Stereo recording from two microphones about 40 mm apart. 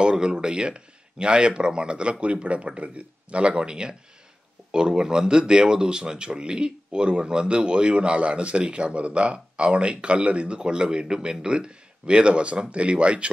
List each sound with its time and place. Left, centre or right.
0.0 s speech: right
11.1 s speech: centre
11.4 s speech: right